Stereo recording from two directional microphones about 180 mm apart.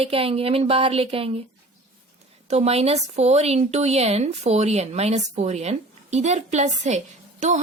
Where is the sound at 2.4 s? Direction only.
35° right (ahead or behind).